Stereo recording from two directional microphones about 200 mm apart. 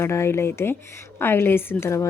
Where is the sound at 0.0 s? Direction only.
10° left (ahead or behind).